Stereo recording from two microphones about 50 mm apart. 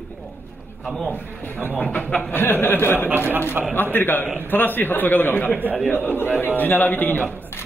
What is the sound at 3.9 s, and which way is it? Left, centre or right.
A man's voice, left.